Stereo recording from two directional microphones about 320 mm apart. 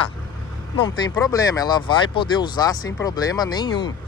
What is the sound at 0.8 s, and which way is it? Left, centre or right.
Speech, centre.